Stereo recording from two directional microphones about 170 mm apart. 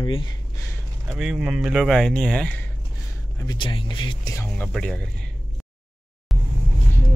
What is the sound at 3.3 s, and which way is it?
Speech, 25° left (ahead or behind).